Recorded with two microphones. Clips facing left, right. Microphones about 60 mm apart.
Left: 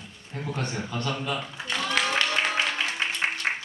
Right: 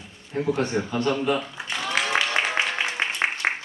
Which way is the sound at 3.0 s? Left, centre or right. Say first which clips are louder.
Right 1 dB; right.